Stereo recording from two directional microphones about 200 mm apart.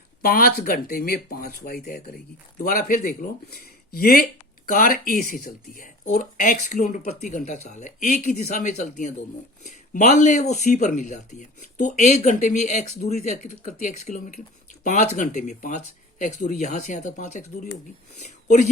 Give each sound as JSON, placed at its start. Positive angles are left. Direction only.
{"t": 0.2, "sound": "speech", "side_deg": 50}